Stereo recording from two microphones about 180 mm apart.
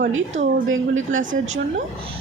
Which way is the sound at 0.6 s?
90° right.